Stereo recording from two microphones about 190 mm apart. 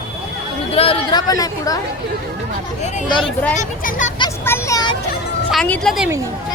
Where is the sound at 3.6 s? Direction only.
40° left (ahead or behind).